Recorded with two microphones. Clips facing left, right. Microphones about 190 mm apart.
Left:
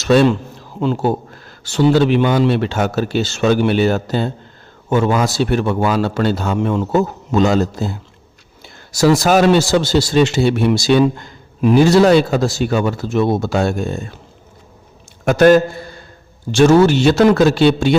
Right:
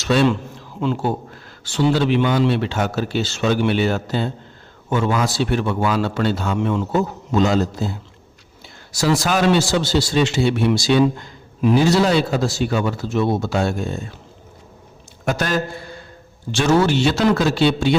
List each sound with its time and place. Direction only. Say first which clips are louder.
0.0 s a man's voice: left 5 dB; 45° left (ahead or behind)
15.2 s a man's voice: left 11 dB; 50° left (ahead or behind)